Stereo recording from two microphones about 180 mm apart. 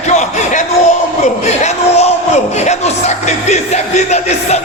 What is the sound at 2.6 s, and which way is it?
Music, 40° left (ahead or behind).